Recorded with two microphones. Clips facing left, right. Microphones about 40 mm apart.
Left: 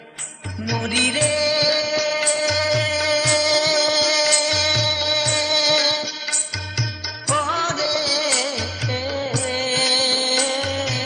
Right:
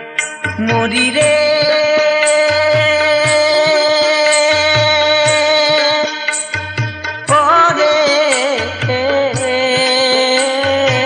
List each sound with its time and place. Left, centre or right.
0.7 s music: right
0.9 s music: right
7.2 s music: right